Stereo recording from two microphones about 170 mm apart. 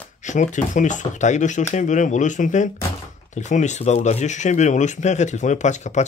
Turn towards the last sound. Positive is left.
turn(degrees=45)  # may be behind; listen again after turning